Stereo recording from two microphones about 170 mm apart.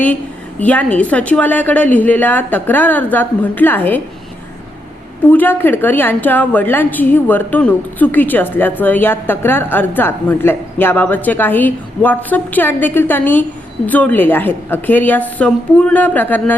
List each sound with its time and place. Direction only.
0.6 s a woman's voice: 10° left (ahead or behind)
5.3 s a woman's voice: 10° left (ahead or behind)